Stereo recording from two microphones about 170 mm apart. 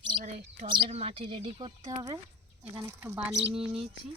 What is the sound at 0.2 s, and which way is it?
Bird, 50° right (ahead or behind).